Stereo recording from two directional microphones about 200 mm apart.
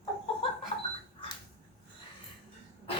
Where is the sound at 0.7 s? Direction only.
30° left (ahead or behind).